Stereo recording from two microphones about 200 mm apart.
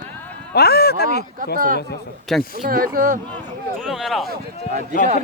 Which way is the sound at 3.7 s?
Centre (ahead or behind).